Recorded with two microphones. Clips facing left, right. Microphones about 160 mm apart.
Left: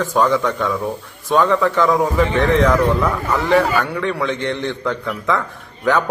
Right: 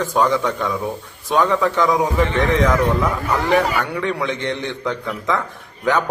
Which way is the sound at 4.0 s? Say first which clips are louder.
Left 1 dB; 15° right (ahead or behind).